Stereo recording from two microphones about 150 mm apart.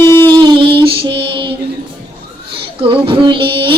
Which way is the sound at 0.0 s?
15° left (ahead or behind).